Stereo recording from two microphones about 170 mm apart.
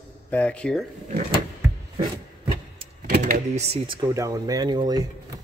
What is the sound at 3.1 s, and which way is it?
Speech, 45° right (ahead or behind).